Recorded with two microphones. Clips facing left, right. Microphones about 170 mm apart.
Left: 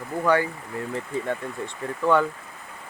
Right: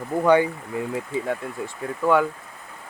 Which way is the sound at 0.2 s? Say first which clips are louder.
Right 4 dB; 20° right (ahead or behind).